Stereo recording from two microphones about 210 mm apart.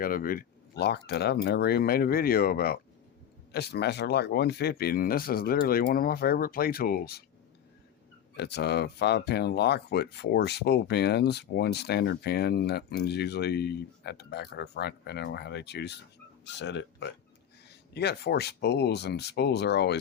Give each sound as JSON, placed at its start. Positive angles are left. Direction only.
{"t": 0.0, "sound": "speech", "side_deg": 45}
{"t": 8.4, "sound": "speech", "side_deg": 50}